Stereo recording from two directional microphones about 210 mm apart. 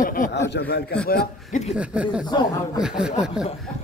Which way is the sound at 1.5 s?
35° left (ahead or behind).